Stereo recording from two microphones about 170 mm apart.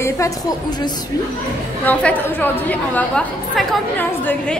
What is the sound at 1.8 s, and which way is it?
A woman's voice, 10° left (ahead or behind).